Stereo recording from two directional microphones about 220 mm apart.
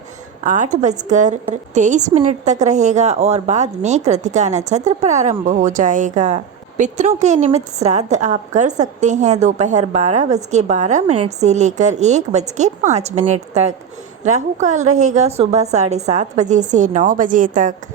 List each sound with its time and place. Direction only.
0.4 s a woman's voice: 35° right (ahead or behind)